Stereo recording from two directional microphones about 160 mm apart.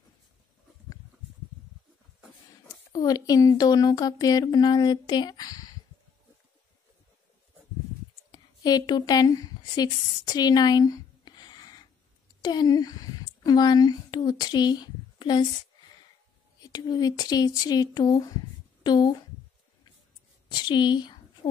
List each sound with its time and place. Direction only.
2.9 s speech: 25° left (ahead or behind)
8.3 s a woman's voice: 25° left (ahead or behind)
16.6 s speech: 25° left (ahead or behind)
20.4 s a sound: 30° left (ahead or behind)